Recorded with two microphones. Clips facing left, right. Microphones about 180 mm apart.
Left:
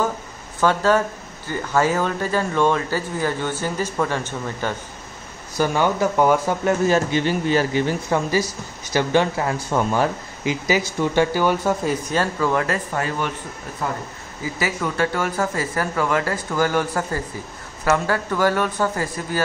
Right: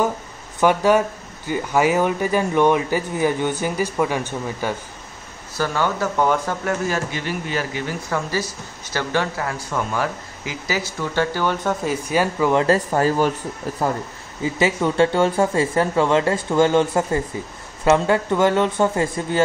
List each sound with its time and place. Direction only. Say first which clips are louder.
0.6 s speech: right 2 dB; 15° right (ahead or behind)
5.6 s speech: left 3 dB; 15° left (ahead or behind)
6.6 s speech: left 5 dB; 25° left (ahead or behind)
11.8 s speech: right 1 dB; 5° right (ahead or behind)
12.6 s speech: right 7 dB; 35° right (ahead or behind)
14.4 s speech: right 5 dB; 25° right (ahead or behind)